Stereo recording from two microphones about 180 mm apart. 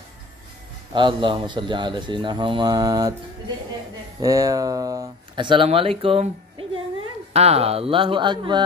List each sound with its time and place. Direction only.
0.9 s speech: 25° right (ahead or behind)
4.2 s speech: 20° right (ahead or behind)
7.3 s speech: 35° right (ahead or behind)